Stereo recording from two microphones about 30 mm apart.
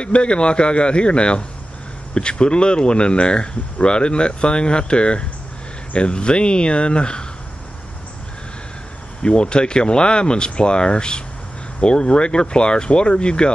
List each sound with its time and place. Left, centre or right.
0.0 s speech: left
9.2 s speech: left